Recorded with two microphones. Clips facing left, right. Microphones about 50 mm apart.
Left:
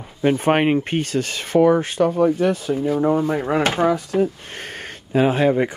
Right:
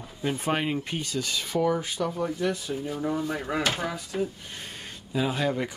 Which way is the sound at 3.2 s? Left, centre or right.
Left.